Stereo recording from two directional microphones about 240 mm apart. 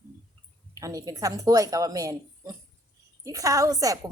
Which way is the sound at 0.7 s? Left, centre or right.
Centre.